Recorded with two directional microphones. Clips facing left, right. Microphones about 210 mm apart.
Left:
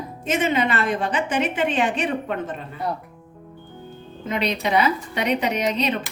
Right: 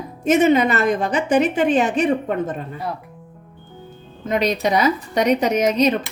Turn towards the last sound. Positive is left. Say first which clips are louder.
# right 6 dB
turn(degrees=-45)  # may be behind; listen again after turning